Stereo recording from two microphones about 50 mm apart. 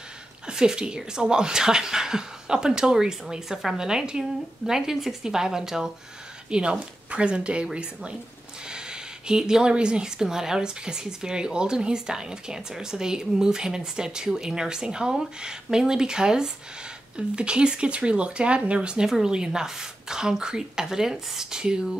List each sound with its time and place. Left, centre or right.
0.5 s a woman's voice: centre